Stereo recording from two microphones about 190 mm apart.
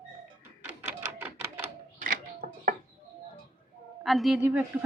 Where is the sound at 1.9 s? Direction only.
45° right (ahead or behind).